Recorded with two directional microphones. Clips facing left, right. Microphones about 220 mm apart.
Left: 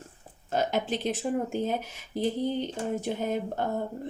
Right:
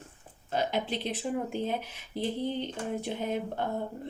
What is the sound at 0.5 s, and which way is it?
Speech, 45° left (ahead or behind).